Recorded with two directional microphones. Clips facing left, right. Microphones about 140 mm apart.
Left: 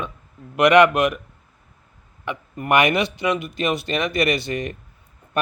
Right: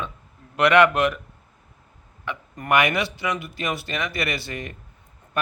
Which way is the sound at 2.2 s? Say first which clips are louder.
Left 3 dB; 20° left (ahead or behind).